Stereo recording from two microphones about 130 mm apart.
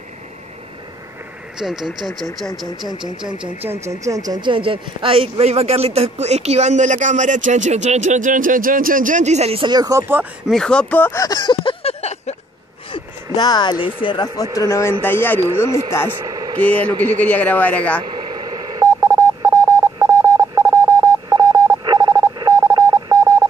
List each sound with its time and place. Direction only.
1.6 s speech: 5° right (ahead or behind)
2.9 s speech: 35° right (ahead or behind)
3.6 s a man's voice: 20° right (ahead or behind); by 9.7 s 50° right (ahead or behind)
9.7 s speech: 30° right (ahead or behind)
10.5 s a man's voice: 5° left (ahead or behind)
11.1 s a sound: 30° left (ahead or behind); by 12.4 s 55° left (ahead or behind)
12.9 s speech: 35° left (ahead or behind); by 15.7 s 15° left (ahead or behind)
16.3 s vehicle: 30° right (ahead or behind)
16.6 s a man's voice: 10° left (ahead or behind)
18.0 s telephone dialing: 35° right (ahead or behind)